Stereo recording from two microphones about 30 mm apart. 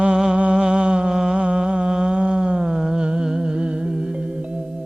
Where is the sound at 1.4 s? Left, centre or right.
Right.